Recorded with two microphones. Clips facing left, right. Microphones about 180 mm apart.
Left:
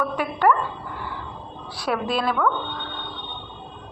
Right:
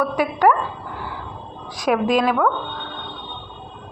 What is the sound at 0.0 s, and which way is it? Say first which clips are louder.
Speech: right 4 dB; 10° right (ahead or behind).